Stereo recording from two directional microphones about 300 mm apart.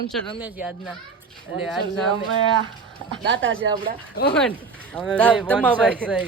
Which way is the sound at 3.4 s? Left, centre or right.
Right.